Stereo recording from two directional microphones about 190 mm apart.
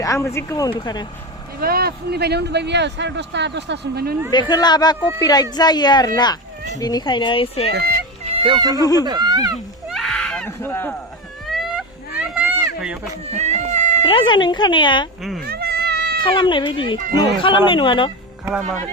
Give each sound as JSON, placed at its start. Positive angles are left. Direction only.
{"t": 0.0, "sound": "speech", "side_deg": 15}
{"t": 1.6, "sound": "speech", "side_deg": -55}
{"t": 4.3, "sound": "speech", "side_deg": 20}
{"t": 7.7, "sound": "speech", "side_deg": -55}
{"t": 8.3, "sound": "speech", "side_deg": -30}
{"t": 8.8, "sound": "speech", "side_deg": 20}
{"t": 9.0, "sound": "speech", "side_deg": -20}
{"t": 9.9, "sound": "a sound", "side_deg": 5}
{"t": 11.4, "sound": "a sound", "side_deg": 0}
{"t": 13.3, "sound": "cat", "side_deg": -35}
{"t": 14.0, "sound": "speech", "side_deg": 25}
{"t": 15.2, "sound": "speech", "side_deg": 0}
{"t": 15.4, "sound": "a sound", "side_deg": -55}
{"t": 16.2, "sound": "speech", "side_deg": 25}